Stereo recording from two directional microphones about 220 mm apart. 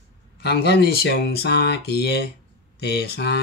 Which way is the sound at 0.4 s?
50° left (ahead or behind).